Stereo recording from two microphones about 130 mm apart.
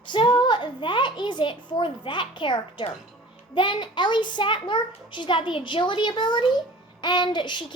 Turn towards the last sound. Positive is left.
turn(degrees=35)  # may be behind; listen again after turning